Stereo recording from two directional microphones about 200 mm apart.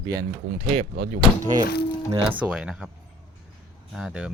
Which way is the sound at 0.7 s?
35° right (ahead or behind).